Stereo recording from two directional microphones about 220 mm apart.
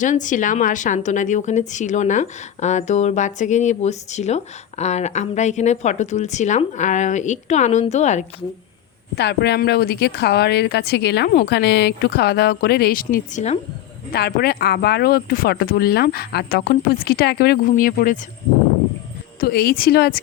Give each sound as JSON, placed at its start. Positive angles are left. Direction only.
{"t": 0.0, "sound": "a woman's voice", "side_deg": 35}
{"t": 9.1, "sound": "speech", "side_deg": 50}
{"t": 14.1, "sound": "speech", "side_deg": 45}
{"t": 19.4, "sound": "speech", "side_deg": 45}